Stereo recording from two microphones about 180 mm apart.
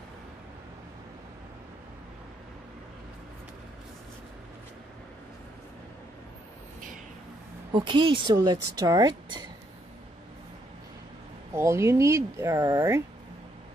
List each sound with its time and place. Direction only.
7.7 s speech: 25° right (ahead or behind)
11.5 s speech: 15° right (ahead or behind)